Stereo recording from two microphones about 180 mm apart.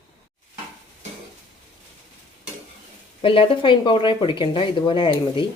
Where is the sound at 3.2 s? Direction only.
30° left (ahead or behind).